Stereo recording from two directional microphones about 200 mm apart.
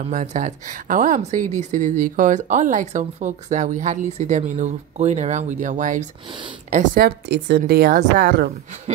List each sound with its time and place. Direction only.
0.1 s speech: 40° right (ahead or behind)
8.9 s speech: 35° right (ahead or behind)